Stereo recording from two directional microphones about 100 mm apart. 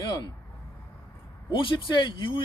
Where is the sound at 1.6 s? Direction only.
55° left (ahead or behind).